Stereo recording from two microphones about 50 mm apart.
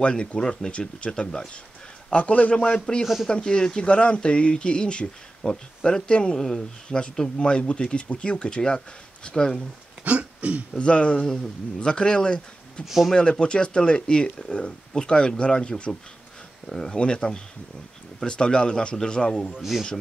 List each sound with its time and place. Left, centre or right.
0.0 s speech: left
10.0 s throat clearing: right
10.7 s speech: left
12.8 s speech: centre
13.1 s speech: centre
16.6 s speech: centre
16.9 s speech: centre
19.5 s speech: centre